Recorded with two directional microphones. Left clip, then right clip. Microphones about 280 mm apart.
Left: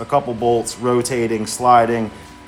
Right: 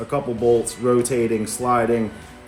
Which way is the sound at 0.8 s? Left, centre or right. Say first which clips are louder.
Left 1 dB; centre.